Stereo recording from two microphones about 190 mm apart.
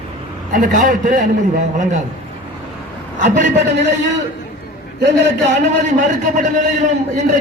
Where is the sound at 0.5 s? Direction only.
45° right (ahead or behind).